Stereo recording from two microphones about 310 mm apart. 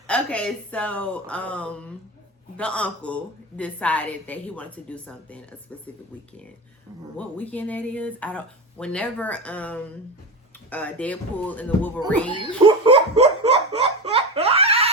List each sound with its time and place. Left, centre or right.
0.1 s speech: centre
7.2 s speech: centre
12.5 s laughter: centre